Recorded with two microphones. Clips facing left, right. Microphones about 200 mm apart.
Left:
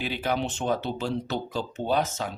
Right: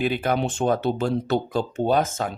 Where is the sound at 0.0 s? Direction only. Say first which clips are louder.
Right 5 dB; 50° right (ahead or behind).